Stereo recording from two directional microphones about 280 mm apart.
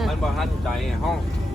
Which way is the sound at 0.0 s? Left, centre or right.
Centre.